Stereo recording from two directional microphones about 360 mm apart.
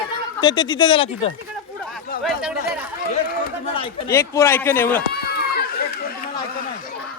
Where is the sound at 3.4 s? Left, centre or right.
Centre.